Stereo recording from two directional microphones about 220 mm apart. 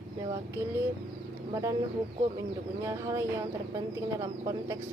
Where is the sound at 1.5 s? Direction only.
15° right (ahead or behind).